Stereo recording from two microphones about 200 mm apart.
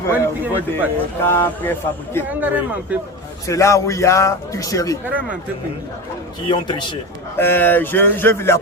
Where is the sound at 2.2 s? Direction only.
10° right (ahead or behind).